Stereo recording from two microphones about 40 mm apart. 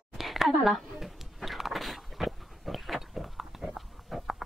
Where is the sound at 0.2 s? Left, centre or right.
Centre.